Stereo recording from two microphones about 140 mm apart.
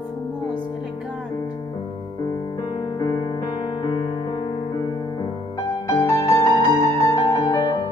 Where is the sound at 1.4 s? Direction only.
30° left (ahead or behind).